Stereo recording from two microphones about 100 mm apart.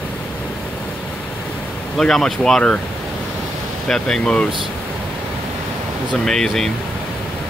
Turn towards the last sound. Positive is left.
turn(degrees=5)  # may be behind; listen again after turning